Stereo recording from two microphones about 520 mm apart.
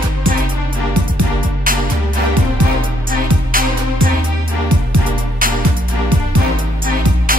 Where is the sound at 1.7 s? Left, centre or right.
Centre.